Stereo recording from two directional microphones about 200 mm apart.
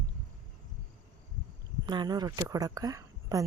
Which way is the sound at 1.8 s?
20° right (ahead or behind).